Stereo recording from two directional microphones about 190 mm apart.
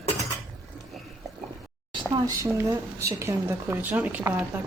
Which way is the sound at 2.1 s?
15° right (ahead or behind).